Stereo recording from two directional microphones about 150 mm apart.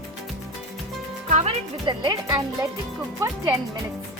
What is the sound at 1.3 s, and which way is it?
Music, 50° right (ahead or behind).